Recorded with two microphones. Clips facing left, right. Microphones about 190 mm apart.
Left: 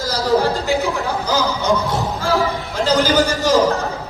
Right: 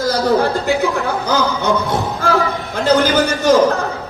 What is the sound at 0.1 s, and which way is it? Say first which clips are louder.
Speech: right 1 dB; 55° right (ahead or behind).